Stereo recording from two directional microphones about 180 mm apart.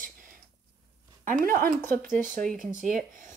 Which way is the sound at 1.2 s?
50° right (ahead or behind).